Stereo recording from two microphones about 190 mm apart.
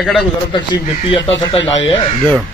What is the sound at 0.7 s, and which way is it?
Speech, 30° left (ahead or behind).